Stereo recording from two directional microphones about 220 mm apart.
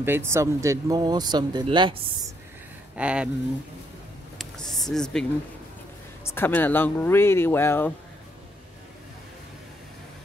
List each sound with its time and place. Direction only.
0.0 s speech: 10° right (ahead or behind)
3.0 s speech: 5° right (ahead or behind)
4.4 s a sound: centre (ahead or behind)
6.2 s speech: 10° left (ahead or behind)